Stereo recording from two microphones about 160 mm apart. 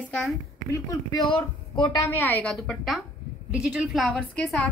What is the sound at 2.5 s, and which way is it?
A woman's voice, centre (ahead or behind).